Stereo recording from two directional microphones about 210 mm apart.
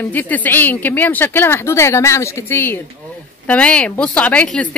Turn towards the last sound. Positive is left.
turn(degrees=5)  # may be behind; listen again after turning